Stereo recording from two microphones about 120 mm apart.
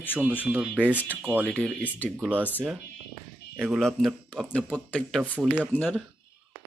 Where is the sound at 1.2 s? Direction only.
15° right (ahead or behind).